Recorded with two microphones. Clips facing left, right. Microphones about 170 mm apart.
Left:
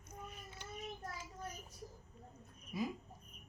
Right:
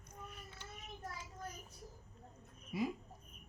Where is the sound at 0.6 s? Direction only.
15° left (ahead or behind).